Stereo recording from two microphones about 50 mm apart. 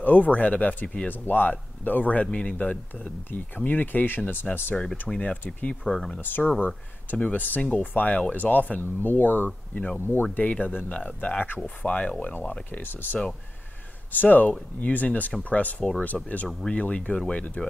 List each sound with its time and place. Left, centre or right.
0.0 s speech: left
5.1 s speech: centre
5.7 s speech: centre
6.6 s speech: left
9.9 s speech: left
10.3 s speech: left
11.6 s speech: left
12.4 s speech: left
16.1 s speech: centre
16.7 s speech: left